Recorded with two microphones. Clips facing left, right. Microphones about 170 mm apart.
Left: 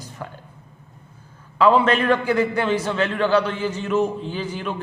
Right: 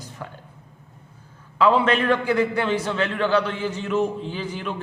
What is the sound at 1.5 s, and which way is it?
A man's voice, 45° left (ahead or behind).